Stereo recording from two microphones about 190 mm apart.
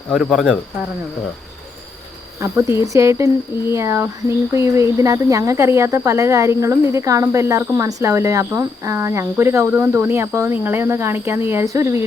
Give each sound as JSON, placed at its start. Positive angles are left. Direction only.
{"t": 0.1, "sound": "speech", "side_deg": 0}
{"t": 2.4, "sound": "speech", "side_deg": -15}